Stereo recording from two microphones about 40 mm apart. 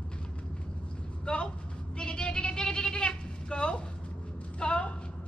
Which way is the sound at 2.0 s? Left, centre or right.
Left.